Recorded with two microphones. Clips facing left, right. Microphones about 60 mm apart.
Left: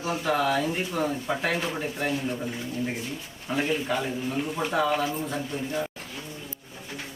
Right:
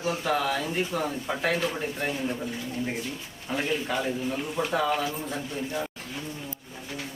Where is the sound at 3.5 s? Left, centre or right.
Centre.